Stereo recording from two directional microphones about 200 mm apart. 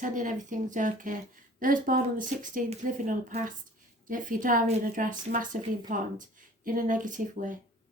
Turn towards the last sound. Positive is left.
turn(degrees=-40)  # may be behind; listen again after turning